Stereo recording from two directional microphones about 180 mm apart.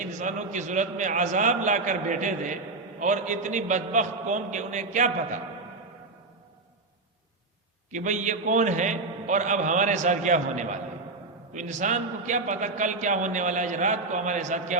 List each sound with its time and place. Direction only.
0.0 s a man's voice: 45° right (ahead or behind)
7.9 s a man's voice: 45° right (ahead or behind)